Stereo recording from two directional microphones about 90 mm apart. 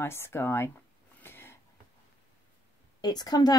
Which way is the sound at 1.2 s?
25° left (ahead or behind).